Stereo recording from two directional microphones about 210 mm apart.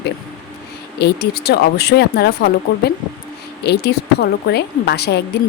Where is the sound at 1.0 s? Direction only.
50° left (ahead or behind).